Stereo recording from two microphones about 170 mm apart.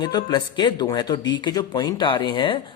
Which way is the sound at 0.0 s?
25° left (ahead or behind).